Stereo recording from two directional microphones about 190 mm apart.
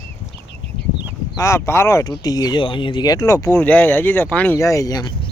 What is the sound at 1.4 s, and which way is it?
Speech, 15° left (ahead or behind).